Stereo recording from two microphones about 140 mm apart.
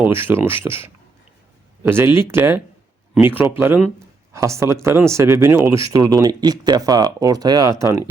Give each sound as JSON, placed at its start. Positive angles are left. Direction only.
{"t": 0.1, "sound": "speech", "side_deg": -15}